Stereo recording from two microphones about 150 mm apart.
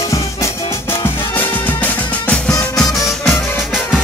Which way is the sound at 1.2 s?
10° left (ahead or behind).